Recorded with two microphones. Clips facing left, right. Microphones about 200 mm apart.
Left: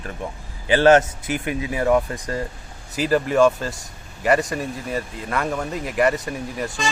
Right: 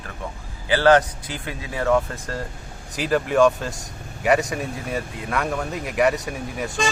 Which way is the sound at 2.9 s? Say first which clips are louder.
Left 1 dB; centre (ahead or behind).